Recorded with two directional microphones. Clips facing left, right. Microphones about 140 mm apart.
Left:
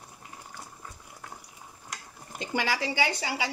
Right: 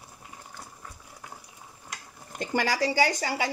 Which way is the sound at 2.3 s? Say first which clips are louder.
Right 3 dB; 45° right (ahead or behind).